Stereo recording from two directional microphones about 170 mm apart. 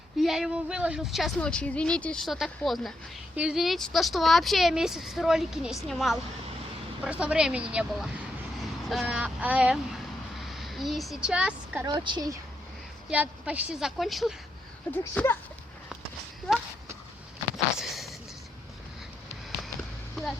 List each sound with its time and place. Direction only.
0.2 s speech: centre (ahead or behind)
11.9 s a woman's voice: 25° right (ahead or behind)
13.1 s speech: 5° right (ahead or behind); by 15.4 s 10° left (ahead or behind)
17.7 s a sound: centre (ahead or behind)